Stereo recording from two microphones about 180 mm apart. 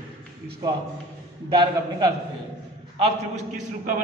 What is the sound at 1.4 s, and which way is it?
A man's voice, 25° right (ahead or behind).